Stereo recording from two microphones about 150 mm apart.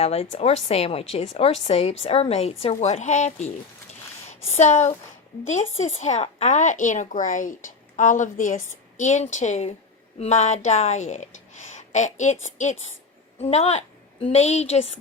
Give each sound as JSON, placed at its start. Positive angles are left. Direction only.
{"t": 0.0, "sound": "a woman's voice", "side_deg": 45}
{"t": 4.6, "sound": "a woman's voice", "side_deg": 50}